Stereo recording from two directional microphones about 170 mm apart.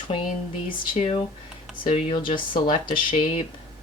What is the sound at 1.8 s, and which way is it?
Speech, 30° left (ahead or behind).